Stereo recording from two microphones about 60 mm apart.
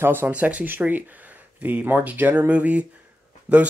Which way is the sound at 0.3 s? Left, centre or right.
Right.